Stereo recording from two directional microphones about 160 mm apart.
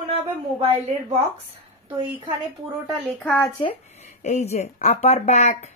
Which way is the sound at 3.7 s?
45° left (ahead or behind).